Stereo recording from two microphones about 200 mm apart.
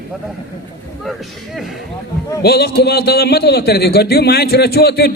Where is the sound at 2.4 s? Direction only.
55° left (ahead or behind).